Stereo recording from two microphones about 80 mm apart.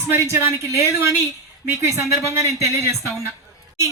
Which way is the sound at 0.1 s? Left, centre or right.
Right.